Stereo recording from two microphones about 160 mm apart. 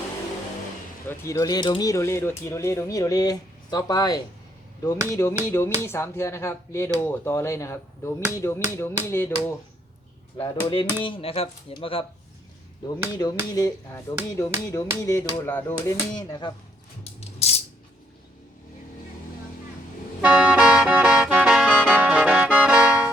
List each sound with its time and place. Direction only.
1.0 s speech: 15° left (ahead or behind); by 12.0 s 35° left (ahead or behind)
12.9 s speech: 25° left (ahead or behind)
16.1 s speech: 25° left (ahead or behind)
20.2 s music: 5° right (ahead or behind)